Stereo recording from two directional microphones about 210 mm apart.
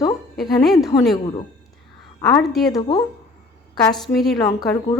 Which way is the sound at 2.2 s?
5° left (ahead or behind).